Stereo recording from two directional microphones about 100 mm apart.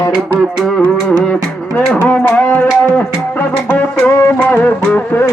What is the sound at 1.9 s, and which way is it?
Speech, 10° left (ahead or behind).